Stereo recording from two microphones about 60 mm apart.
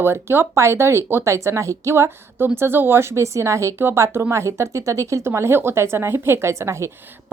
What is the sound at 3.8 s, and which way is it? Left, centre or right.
Speech, right.